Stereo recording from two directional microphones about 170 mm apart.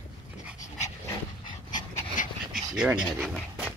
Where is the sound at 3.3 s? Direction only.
5° right (ahead or behind).